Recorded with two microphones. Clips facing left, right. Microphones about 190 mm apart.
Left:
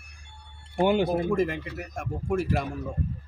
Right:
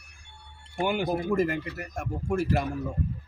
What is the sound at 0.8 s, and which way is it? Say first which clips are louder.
Speech: left 5 dB; 25° left (ahead or behind).